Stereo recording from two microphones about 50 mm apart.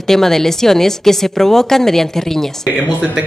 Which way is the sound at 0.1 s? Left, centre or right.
Centre.